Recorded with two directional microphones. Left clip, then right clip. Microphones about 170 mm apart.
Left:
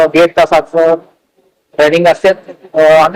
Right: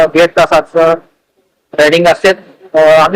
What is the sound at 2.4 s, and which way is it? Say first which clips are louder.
Speech: left 4 dB; 70° left (ahead or behind).